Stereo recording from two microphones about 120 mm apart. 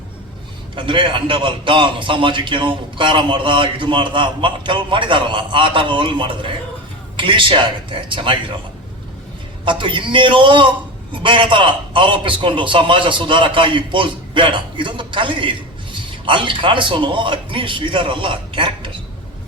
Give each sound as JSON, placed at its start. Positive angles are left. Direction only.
{"t": 0.8, "sound": "a man's voice", "side_deg": -45}
{"t": 9.6, "sound": "a man's voice", "side_deg": -45}